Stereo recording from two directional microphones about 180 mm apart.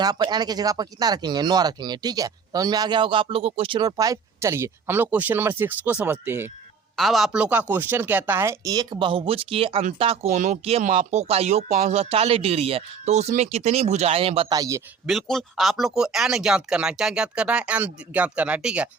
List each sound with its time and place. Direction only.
0.0 s speech: 20° right (ahead or behind)
6.9 s speech: centre (ahead or behind); by 14.4 s 35° right (ahead or behind)
14.5 s speech: 20° right (ahead or behind)
15.0 s speech: centre (ahead or behind)